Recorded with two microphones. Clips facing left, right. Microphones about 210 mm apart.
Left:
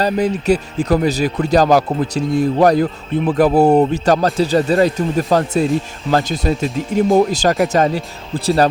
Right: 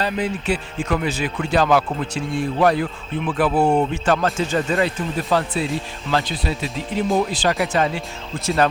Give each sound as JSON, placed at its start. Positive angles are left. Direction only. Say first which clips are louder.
{"t": 0.0, "sound": "speech", "louder": "left 6 dB", "side_deg": 40}